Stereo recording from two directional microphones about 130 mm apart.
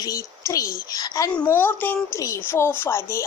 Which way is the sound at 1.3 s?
15° left (ahead or behind).